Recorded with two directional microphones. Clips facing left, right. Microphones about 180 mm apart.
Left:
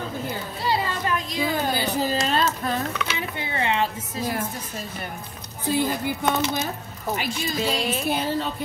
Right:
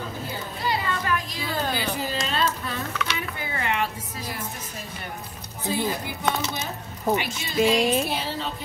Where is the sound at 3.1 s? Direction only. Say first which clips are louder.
Left 3 dB; 25° left (ahead or behind).